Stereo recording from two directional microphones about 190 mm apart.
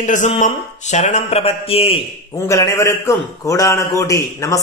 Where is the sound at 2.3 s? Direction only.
15° left (ahead or behind).